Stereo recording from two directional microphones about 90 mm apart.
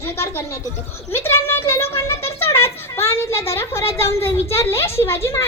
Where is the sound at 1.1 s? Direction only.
30° left (ahead or behind).